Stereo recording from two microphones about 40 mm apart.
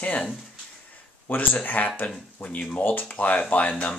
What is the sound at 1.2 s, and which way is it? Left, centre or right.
Speech, left.